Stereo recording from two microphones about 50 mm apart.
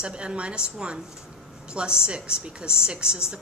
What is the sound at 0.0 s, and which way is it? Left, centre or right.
A woman's voice, centre.